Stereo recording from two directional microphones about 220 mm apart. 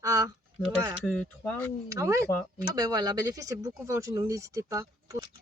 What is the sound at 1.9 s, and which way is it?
Speech, 15° right (ahead or behind).